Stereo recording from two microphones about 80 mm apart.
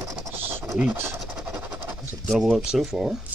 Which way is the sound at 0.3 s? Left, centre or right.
Right.